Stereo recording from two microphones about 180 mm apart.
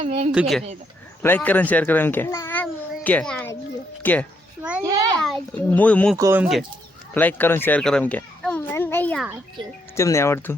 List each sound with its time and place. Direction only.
0.0 s a woman's voice: 35° right (ahead or behind)
0.3 s speech: centre (ahead or behind)
3.0 s a sound: 5° left (ahead or behind)
4.0 s speech: 10° left (ahead or behind)
4.8 s a sound: 20° right (ahead or behind)
5.2 s speech: 5° left (ahead or behind)
6.1 s speech: 15° right (ahead or behind)
6.4 s speech: 5° right (ahead or behind)
7.1 s a sound: 10° left (ahead or behind)
9.9 s speech: 15° left (ahead or behind)